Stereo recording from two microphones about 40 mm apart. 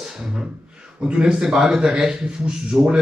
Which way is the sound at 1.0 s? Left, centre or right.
Right.